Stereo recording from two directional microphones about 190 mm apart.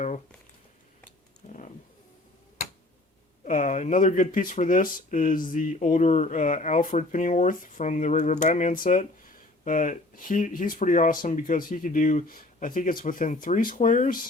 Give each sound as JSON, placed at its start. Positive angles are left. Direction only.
{"t": 3.4, "sound": "speech", "side_deg": 40}